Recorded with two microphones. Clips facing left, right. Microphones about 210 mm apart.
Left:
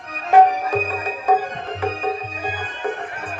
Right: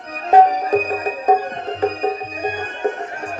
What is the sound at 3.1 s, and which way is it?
Music, 40° right (ahead or behind).